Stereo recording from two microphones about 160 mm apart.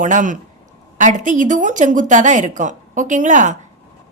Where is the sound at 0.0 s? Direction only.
50° right (ahead or behind).